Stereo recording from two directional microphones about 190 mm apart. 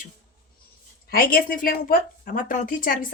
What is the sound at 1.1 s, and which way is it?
A woman's voice, 50° left (ahead or behind).